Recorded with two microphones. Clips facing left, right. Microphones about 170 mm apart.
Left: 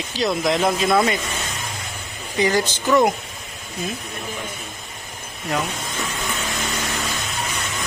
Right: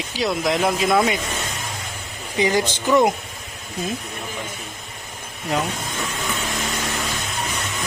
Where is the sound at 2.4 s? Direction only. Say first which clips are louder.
Even; 20° right (ahead or behind).